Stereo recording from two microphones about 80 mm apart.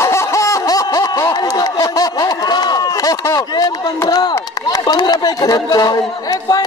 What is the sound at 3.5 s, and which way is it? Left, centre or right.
Speech, left.